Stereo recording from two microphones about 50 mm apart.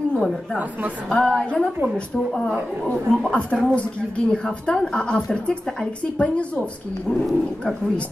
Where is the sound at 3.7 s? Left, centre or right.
Left.